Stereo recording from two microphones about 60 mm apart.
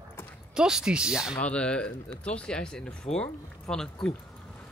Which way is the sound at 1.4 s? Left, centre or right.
Centre.